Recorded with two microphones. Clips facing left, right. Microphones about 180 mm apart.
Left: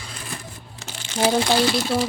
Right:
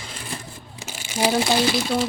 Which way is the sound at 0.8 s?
10° right (ahead or behind).